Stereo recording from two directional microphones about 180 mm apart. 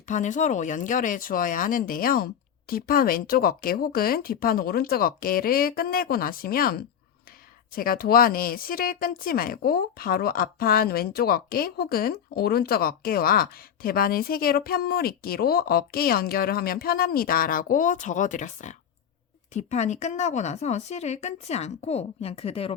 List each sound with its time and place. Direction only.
0.1 s speech: 45° left (ahead or behind)